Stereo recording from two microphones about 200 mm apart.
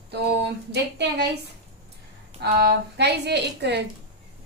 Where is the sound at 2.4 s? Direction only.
55° right (ahead or behind).